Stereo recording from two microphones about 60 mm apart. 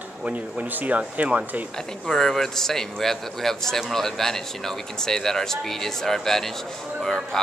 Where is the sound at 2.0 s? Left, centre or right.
Centre.